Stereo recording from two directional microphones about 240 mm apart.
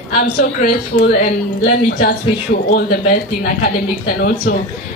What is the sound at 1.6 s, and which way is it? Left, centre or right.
Speech, left.